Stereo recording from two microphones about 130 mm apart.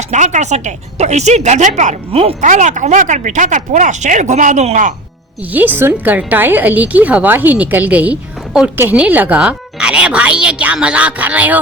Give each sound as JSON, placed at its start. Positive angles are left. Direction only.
{"t": 0.1, "sound": "a woman's voice", "side_deg": -65}
{"t": 5.5, "sound": "a woman's voice", "side_deg": -15}